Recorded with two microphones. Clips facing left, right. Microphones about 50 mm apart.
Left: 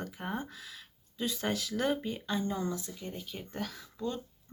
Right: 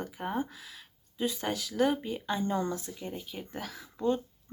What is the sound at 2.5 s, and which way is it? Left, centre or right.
Speech, right.